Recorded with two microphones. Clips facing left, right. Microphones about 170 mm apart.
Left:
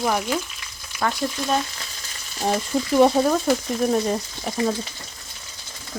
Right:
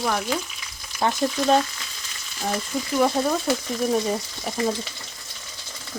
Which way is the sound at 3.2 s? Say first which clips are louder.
Left 4 dB; 5° left (ahead or behind).